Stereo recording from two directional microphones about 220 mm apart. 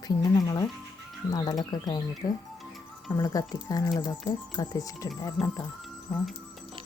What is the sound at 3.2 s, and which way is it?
Speech, 20° left (ahead or behind).